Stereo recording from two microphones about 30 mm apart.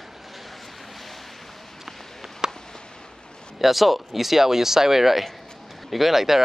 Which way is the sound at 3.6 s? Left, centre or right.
Centre.